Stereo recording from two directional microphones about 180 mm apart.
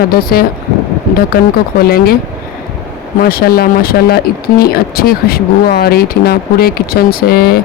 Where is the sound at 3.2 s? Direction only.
55° left (ahead or behind).